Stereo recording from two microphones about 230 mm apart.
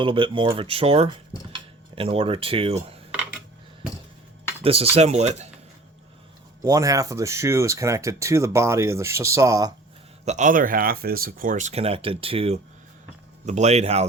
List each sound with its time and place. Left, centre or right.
0.0 s speech: right
3.1 s cutlery: centre
4.6 s speech: right
6.6 s speech: centre
10.2 s speech: right